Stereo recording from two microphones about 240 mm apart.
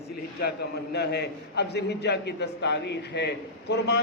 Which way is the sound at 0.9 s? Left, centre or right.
Left.